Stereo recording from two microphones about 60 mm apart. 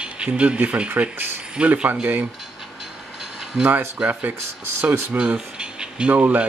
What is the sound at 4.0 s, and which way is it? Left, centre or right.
Speech, right.